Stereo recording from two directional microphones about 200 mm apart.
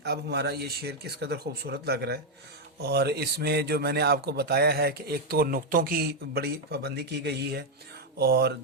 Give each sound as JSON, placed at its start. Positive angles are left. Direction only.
{"t": 0.0, "sound": "a man's voice", "side_deg": -55}